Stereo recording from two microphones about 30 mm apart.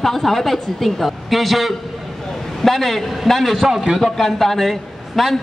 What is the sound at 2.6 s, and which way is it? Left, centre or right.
A woman's voice, centre.